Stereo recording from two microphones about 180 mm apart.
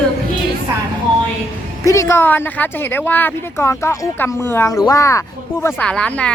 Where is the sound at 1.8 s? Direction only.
15° left (ahead or behind).